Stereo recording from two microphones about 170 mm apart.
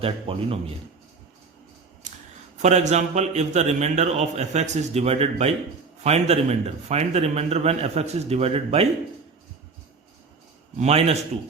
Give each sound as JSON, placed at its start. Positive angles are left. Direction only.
{"t": 0.0, "sound": "a man's voice", "side_deg": -35}
{"t": 2.0, "sound": "a sound", "side_deg": -45}
{"t": 2.6, "sound": "a man's voice", "side_deg": -45}
{"t": 10.8, "sound": "a man's voice", "side_deg": -40}